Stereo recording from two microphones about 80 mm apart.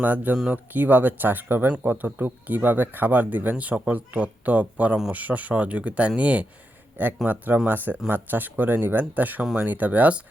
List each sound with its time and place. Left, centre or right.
0.0 s speech: right